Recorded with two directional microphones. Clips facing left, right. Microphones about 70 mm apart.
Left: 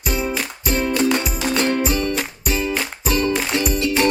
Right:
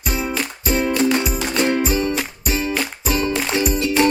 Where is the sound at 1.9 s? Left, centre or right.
Centre.